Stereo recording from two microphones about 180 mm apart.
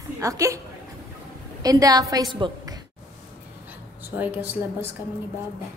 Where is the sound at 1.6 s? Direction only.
20° right (ahead or behind).